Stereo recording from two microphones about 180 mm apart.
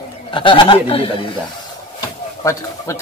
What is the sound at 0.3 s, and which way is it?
Speech, 30° left (ahead or behind).